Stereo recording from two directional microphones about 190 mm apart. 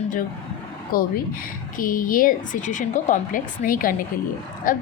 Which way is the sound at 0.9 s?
50° left (ahead or behind).